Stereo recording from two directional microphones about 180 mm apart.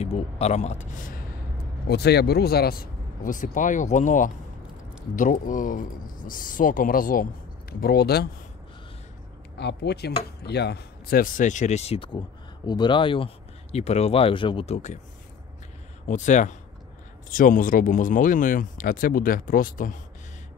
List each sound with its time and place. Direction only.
0.0 s a man's voice: 35° left (ahead or behind)
1.9 s speech: 65° left (ahead or behind)
9.6 s speech: 65° left (ahead or behind); by 14.8 s 30° left (ahead or behind)
16.1 s speech: 40° left (ahead or behind)